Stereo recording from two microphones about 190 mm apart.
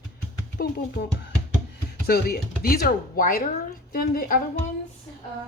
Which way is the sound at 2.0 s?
55° left (ahead or behind).